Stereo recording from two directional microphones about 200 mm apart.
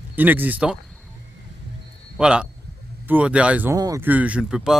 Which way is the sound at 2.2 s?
5° right (ahead or behind).